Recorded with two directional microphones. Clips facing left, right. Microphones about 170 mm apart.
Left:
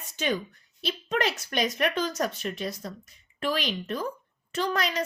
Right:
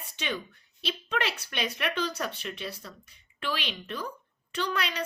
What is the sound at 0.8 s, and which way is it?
A woman's voice, 40° left (ahead or behind).